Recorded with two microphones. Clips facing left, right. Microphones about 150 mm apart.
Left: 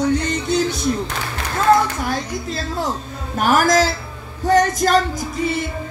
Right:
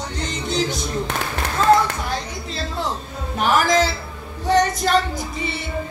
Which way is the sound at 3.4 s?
45° left (ahead or behind).